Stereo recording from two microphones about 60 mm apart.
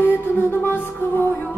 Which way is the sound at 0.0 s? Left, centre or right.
Left.